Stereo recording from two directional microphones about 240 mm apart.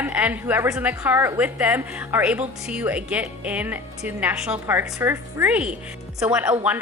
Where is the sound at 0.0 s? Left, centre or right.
Centre.